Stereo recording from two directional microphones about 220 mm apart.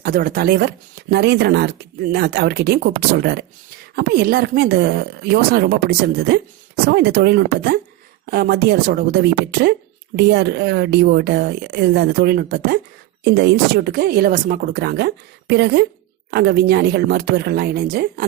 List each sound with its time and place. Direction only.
0.0 s speech: 40° right (ahead or behind)